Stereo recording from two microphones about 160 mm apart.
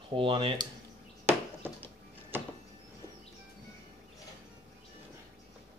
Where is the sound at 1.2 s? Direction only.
15° right (ahead or behind).